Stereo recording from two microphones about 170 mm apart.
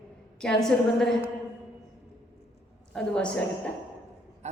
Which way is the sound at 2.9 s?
5° left (ahead or behind).